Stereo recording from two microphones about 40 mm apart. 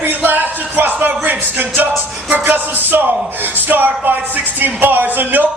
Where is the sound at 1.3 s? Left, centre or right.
Right.